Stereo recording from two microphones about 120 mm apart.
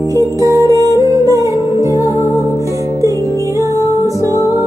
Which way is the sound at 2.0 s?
25° left (ahead or behind).